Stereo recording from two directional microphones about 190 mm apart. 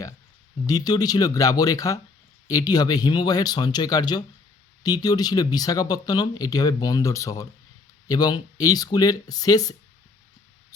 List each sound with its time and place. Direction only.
0.7 s speech: 20° left (ahead or behind)